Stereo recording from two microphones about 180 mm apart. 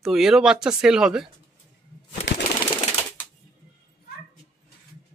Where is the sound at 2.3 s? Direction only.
90° left.